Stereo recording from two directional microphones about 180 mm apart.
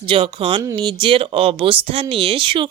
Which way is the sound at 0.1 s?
30° right (ahead or behind).